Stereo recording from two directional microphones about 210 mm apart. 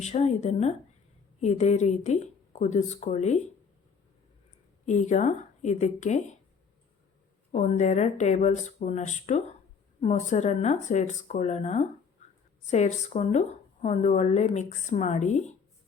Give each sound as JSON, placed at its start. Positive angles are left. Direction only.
{"t": 0.0, "sound": "speech", "side_deg": 30}
{"t": 4.9, "sound": "speech", "side_deg": 35}
{"t": 7.5, "sound": "speech", "side_deg": 35}
{"t": 12.2, "sound": "a sound", "side_deg": 35}
{"t": 12.6, "sound": "speech", "side_deg": 35}